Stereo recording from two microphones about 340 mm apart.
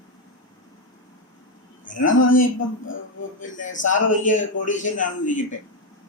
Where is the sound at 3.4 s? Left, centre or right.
Left.